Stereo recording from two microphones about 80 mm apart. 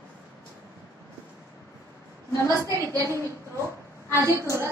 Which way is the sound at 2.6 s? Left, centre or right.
Right.